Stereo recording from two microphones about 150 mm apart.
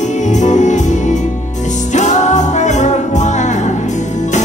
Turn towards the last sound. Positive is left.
turn(degrees=55)  # may be behind; listen again after turning